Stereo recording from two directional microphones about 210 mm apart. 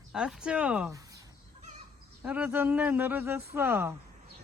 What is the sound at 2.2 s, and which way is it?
Speech, 5° right (ahead or behind).